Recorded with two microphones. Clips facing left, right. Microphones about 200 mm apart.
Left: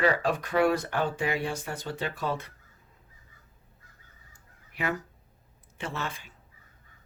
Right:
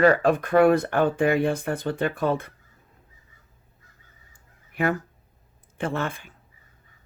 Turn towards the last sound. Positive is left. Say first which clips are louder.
# right 8 dB
turn(degrees=-55)  # may be behind; listen again after turning